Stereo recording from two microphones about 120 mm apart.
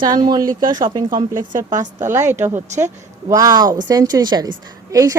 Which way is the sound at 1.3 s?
90° right.